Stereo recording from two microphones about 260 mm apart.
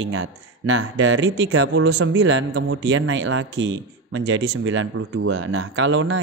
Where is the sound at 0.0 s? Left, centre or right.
Right.